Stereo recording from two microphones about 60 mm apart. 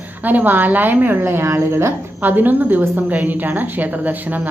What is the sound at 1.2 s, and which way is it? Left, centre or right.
Speech, right.